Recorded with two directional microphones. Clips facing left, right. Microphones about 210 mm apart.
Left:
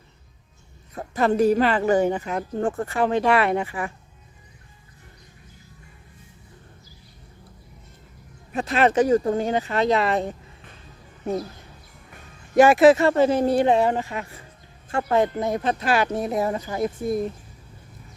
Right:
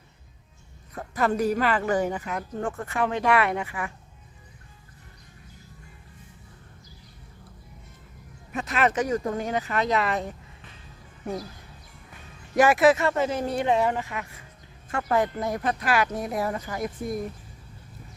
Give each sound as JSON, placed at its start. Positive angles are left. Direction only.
{"t": 1.1, "sound": "a woman's voice", "side_deg": 25}
{"t": 8.5, "sound": "a woman's voice", "side_deg": 30}
{"t": 12.5, "sound": "a woman's voice", "side_deg": 25}